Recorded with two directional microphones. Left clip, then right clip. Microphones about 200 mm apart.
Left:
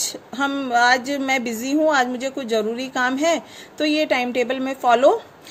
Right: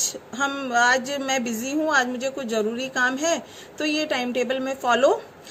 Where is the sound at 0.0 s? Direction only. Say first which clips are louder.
Left 2 dB; 40° left (ahead or behind).